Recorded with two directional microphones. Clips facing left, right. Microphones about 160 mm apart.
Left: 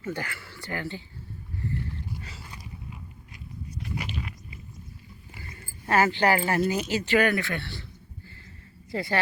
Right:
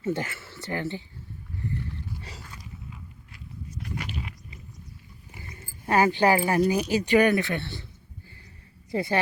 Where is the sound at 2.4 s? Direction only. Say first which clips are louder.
Left 1 dB; 10° left (ahead or behind).